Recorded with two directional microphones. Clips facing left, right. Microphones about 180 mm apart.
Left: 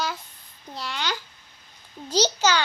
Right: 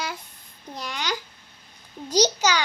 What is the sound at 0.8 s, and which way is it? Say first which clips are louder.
A child's voice: even; 15° right (ahead or behind).